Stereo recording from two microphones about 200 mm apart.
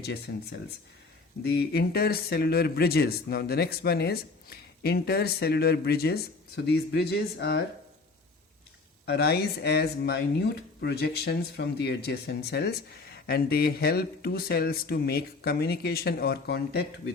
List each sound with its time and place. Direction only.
1.5 s speech: 55° left (ahead or behind)
9.0 s speech: 55° left (ahead or behind)